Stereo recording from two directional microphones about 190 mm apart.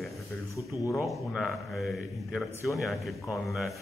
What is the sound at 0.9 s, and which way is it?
A man's voice, centre (ahead or behind).